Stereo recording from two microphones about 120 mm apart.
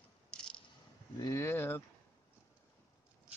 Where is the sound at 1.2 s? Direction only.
25° left (ahead or behind).